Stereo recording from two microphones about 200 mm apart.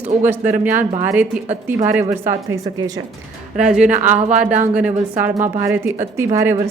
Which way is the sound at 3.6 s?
5° right (ahead or behind).